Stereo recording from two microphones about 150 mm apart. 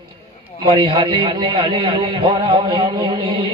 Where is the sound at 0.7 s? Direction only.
30° right (ahead or behind).